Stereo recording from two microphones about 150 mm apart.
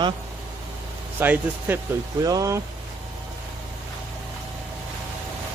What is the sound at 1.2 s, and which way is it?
Speech, 15° right (ahead or behind).